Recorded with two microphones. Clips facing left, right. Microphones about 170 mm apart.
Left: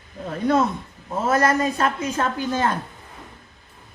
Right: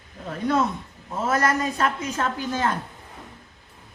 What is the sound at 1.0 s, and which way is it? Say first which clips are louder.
A woman's voice: left 3 dB; 35° left (ahead or behind).